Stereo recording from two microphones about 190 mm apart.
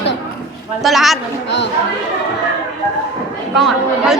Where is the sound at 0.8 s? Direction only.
Centre (ahead or behind).